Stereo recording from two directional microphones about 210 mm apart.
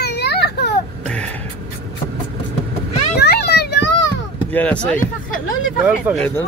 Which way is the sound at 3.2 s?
50° left (ahead or behind).